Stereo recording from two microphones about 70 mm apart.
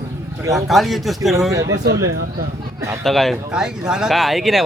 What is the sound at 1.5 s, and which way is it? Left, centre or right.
Speech, right.